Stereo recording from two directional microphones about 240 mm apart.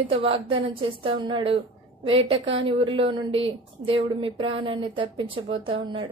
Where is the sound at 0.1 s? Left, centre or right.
Right.